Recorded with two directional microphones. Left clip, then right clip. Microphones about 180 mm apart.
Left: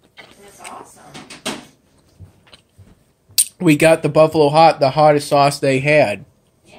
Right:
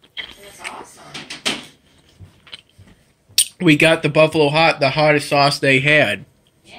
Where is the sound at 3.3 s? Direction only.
5° left (ahead or behind).